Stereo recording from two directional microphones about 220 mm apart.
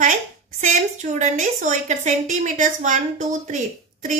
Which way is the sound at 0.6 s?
35° right (ahead or behind).